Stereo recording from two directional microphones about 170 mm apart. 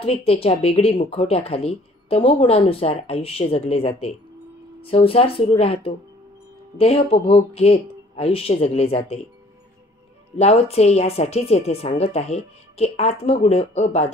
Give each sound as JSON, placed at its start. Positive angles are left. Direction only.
{"t": 0.0, "sound": "speech", "side_deg": 35}
{"t": 10.3, "sound": "speech", "side_deg": 35}